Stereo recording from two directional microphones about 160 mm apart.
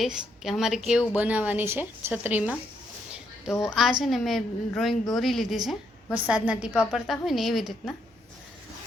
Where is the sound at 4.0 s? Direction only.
Centre (ahead or behind).